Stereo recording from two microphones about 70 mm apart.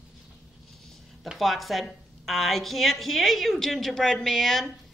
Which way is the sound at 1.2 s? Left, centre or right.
Centre.